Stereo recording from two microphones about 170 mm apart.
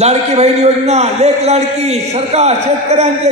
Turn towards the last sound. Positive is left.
turn(degrees=-40)  # may be behind; listen again after turning